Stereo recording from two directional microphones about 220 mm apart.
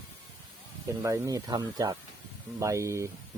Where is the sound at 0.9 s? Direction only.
15° right (ahead or behind).